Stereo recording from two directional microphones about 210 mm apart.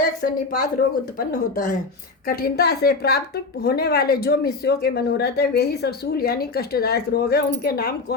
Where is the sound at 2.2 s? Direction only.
45° left (ahead or behind).